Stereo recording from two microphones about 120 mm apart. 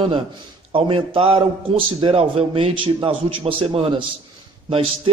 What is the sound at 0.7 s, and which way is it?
A man's voice, 50° right (ahead or behind).